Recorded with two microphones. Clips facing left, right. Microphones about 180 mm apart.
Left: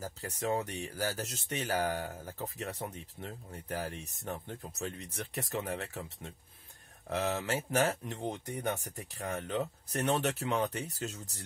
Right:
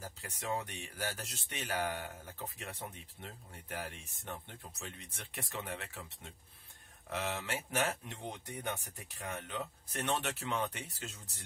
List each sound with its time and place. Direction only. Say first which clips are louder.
0.0 s speech: left 7 dB; 40° left (ahead or behind)